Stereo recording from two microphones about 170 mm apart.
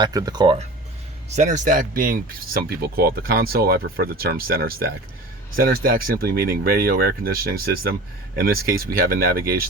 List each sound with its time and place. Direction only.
0.0 s speech: 20° right (ahead or behind)
1.3 s speech: 45° right (ahead or behind); by 9.4 s 60° right (ahead or behind)